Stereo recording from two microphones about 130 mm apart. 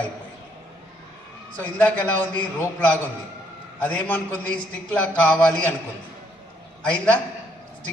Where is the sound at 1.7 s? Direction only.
10° left (ahead or behind).